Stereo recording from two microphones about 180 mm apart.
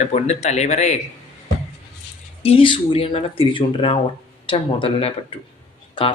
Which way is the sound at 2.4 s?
30° left (ahead or behind).